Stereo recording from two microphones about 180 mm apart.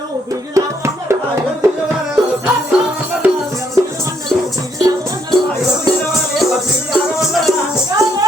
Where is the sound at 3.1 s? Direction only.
15° right (ahead or behind).